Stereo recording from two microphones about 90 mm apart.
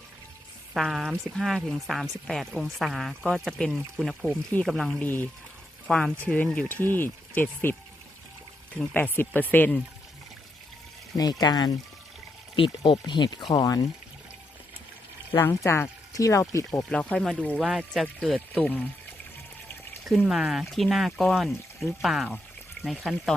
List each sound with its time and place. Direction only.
0.8 s speech: centre (ahead or behind)
4.9 s speech: 20° left (ahead or behind)
5.9 s speech: 10° left (ahead or behind)
8.8 s speech: 10° left (ahead or behind)
11.2 s speech: 45° left (ahead or behind)
12.5 s speech: 70° left (ahead or behind); by 13.8 s 50° left (ahead or behind)
15.4 s speech: 30° left (ahead or behind)
16.9 s speech: 15° left (ahead or behind)
17.6 s speech: 5° right (ahead or behind)
18.5 s speech: 15° left (ahead or behind)
20.2 s speech: 5° right (ahead or behind)